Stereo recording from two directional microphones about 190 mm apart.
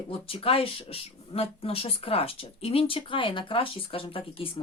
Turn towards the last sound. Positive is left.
turn(degrees=30)  # may be behind; listen again after turning